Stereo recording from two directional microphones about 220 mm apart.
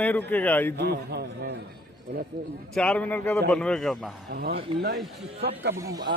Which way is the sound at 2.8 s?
5° left (ahead or behind).